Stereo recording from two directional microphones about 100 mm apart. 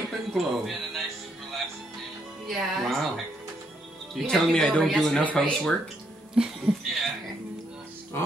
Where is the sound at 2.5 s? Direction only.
Centre (ahead or behind).